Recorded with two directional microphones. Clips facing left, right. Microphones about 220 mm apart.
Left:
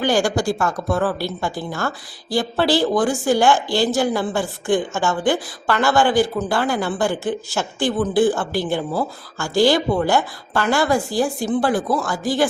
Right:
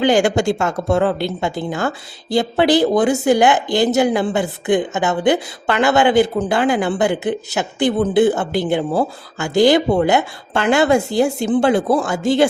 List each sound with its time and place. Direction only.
0.0 s a woman's voice: 20° right (ahead or behind)